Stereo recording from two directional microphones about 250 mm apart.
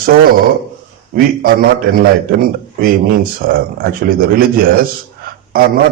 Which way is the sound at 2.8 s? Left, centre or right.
Right.